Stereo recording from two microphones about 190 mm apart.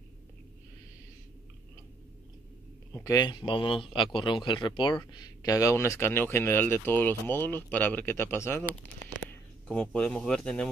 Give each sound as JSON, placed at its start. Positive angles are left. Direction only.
{"t": 3.0, "sound": "speech", "side_deg": 20}